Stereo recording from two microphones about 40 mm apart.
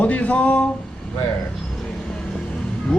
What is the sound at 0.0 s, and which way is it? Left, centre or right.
Music, left.